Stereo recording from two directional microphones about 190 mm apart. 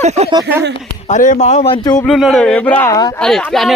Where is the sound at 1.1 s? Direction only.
40° left (ahead or behind); by 2.0 s 20° left (ahead or behind).